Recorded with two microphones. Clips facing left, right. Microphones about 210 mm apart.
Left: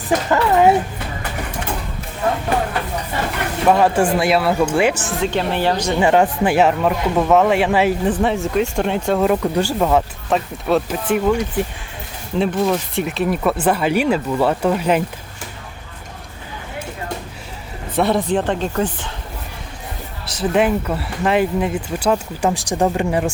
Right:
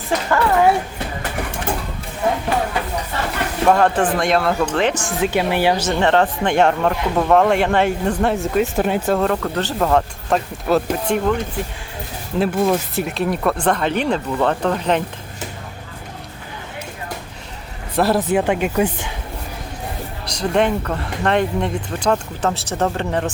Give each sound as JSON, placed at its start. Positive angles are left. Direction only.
{"t": 0.3, "sound": "speech", "side_deg": 20}
{"t": 3.7, "sound": "speech", "side_deg": 5}
{"t": 5.2, "sound": "speech", "side_deg": -10}
{"t": 6.0, "sound": "speech", "side_deg": 10}
{"t": 9.2, "sound": "speech", "side_deg": 10}
{"t": 12.4, "sound": "speech", "side_deg": -5}
{"t": 17.9, "sound": "speech", "side_deg": 0}
{"t": 20.2, "sound": "speech", "side_deg": 5}